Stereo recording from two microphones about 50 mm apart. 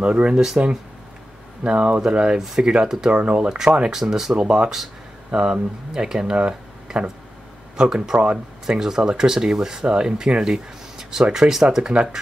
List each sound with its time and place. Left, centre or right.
0.0 s speech: right
1.6 s speech: right
4.0 s speech: centre
4.4 s speech: centre